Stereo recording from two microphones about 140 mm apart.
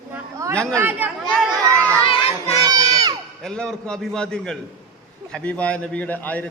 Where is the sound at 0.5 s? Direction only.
5° left (ahead or behind).